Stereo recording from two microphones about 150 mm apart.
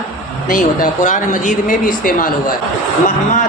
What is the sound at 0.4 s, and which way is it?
A woman's voice, 65° left (ahead or behind).